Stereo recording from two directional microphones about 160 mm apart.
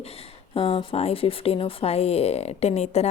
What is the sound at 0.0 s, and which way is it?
Speech, 40° left (ahead or behind).